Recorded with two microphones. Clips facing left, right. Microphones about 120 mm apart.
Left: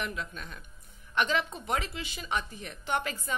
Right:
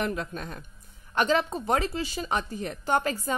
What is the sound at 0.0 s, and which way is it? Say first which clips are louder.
A woman's voice: right 6 dB; 40° right (ahead or behind).